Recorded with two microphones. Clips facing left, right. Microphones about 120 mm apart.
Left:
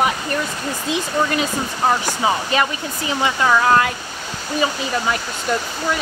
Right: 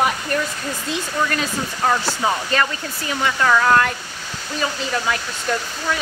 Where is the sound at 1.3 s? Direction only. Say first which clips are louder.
Left 3 dB; 15° left (ahead or behind).